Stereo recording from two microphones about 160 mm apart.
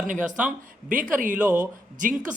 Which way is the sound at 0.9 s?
60° right (ahead or behind).